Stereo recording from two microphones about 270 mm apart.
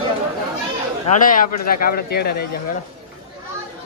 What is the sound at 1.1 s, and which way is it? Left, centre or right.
Speech, left.